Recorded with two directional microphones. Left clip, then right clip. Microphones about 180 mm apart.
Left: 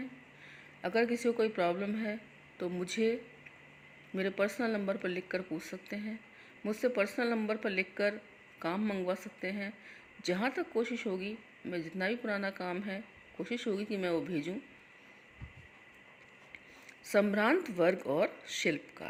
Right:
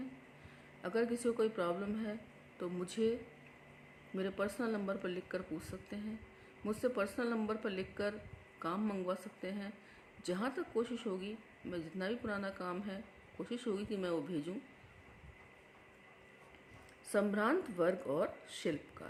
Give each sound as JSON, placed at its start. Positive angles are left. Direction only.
{"t": 0.8, "sound": "speech", "side_deg": 15}
{"t": 17.1, "sound": "speech", "side_deg": 20}